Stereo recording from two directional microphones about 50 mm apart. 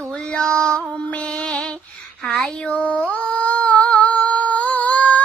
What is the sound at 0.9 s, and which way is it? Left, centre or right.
Female singing, left.